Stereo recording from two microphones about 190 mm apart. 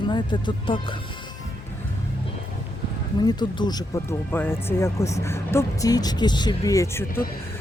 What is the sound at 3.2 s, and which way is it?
Speech, 20° left (ahead or behind).